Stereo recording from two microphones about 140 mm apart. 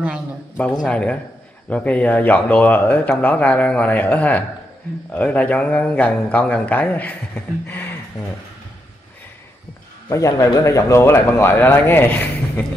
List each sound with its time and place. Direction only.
0.8 s speech: 10° left (ahead or behind)
10.0 s speech: 25° left (ahead or behind)